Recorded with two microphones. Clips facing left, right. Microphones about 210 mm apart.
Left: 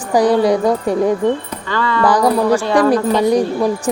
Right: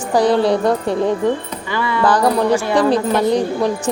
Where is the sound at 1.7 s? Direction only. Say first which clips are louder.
Left 2 dB; 10° right (ahead or behind).